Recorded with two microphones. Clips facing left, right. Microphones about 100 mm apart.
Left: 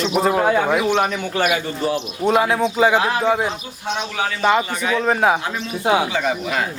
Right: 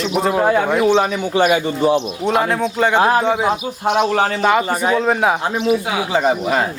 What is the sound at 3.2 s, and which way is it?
Speech, centre (ahead or behind).